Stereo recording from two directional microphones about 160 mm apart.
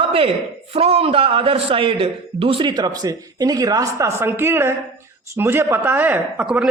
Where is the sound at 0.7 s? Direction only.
40° right (ahead or behind).